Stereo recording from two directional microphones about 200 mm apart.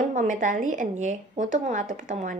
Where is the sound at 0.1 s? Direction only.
40° right (ahead or behind).